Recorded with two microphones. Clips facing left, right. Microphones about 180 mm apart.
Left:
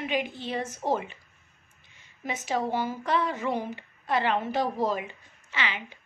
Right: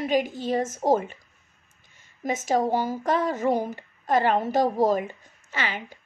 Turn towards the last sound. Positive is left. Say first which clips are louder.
# right 2 dB
turn(degrees=-45)  # may be behind; listen again after turning